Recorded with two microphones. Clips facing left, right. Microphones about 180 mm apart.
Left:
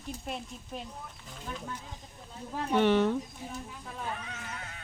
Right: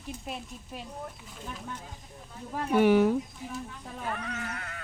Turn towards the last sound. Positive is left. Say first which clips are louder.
# right 5 dB
turn(degrees=-65)  # may be behind; listen again after turning